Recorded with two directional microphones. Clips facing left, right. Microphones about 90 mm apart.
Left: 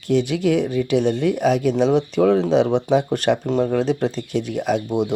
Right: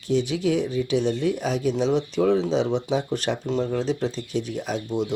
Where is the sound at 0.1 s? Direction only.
60° left (ahead or behind).